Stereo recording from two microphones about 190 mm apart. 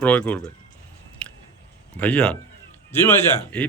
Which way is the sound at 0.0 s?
10° left (ahead or behind).